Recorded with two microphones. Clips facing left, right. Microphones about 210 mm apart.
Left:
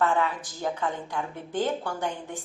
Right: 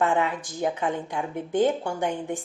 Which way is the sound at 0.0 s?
20° right (ahead or behind).